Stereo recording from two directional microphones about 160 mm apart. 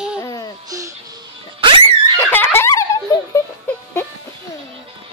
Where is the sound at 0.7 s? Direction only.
20° right (ahead or behind).